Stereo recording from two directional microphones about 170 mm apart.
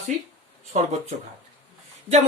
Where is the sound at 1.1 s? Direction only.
45° right (ahead or behind).